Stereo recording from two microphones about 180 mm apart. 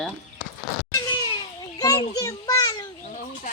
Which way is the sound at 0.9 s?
25° left (ahead or behind).